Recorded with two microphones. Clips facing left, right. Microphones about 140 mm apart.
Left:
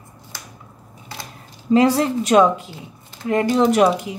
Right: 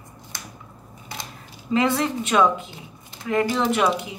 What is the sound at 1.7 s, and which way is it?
Speech, 35° left (ahead or behind).